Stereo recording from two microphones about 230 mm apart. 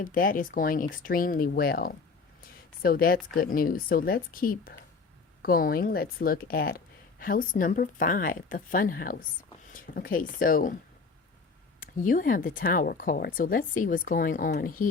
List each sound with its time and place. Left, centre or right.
0.0 s speech: left
11.8 s speech: left